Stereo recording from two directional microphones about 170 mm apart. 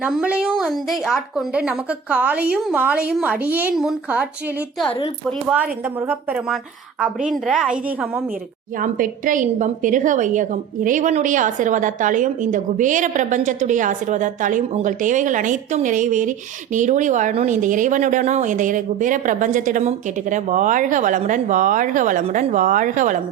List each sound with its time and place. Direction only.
0.0 s speech: 5° right (ahead or behind)
5.5 s a woman's voice: 10° right (ahead or behind)
8.8 s a woman's voice: 50° right (ahead or behind)